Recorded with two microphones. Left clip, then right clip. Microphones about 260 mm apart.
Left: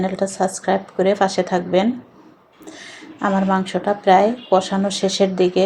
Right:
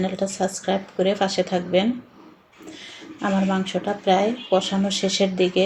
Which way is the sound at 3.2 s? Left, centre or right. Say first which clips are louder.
Left 5 dB; left.